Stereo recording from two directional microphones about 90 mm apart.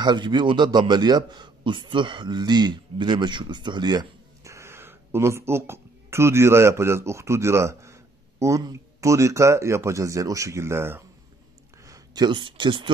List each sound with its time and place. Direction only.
0.0 s a man's voice: 55° right (ahead or behind)
4.5 s speech: 30° right (ahead or behind)
11.8 s speech: 45° right (ahead or behind); by 12.9 s 60° right (ahead or behind)